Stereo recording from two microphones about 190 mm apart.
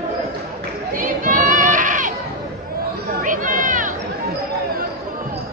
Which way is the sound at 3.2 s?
45° right (ahead or behind).